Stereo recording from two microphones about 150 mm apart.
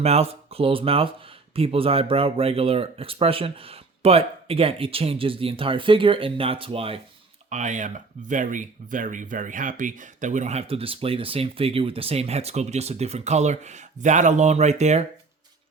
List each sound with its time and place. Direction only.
0.0 s speech: 45° right (ahead or behind)
7.5 s speech: 55° right (ahead or behind)